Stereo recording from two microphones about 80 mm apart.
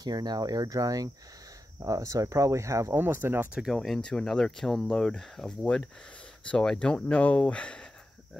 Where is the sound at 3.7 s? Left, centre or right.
Centre.